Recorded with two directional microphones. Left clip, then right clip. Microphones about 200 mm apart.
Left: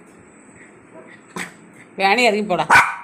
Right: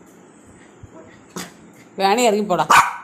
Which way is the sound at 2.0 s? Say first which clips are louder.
Left 1 dB; 15° right (ahead or behind).